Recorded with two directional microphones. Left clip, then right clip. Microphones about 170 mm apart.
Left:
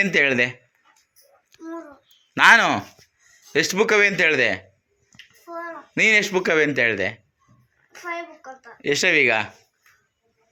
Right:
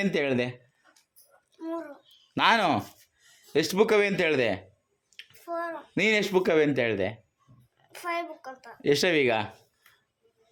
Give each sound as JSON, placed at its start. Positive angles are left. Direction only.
{"t": 0.0, "sound": "speech", "side_deg": -5}
{"t": 2.3, "sound": "speech", "side_deg": 0}
{"t": 5.5, "sound": "a sound", "side_deg": -45}
{"t": 5.9, "sound": "speech", "side_deg": -10}
{"t": 7.9, "sound": "a child's voice", "side_deg": -55}
{"t": 8.8, "sound": "speech", "side_deg": -20}